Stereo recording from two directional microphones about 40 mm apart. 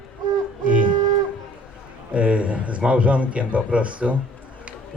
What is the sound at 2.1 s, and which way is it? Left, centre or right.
A man's voice, right.